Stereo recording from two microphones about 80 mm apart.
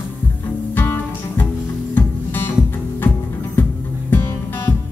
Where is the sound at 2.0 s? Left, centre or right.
Left.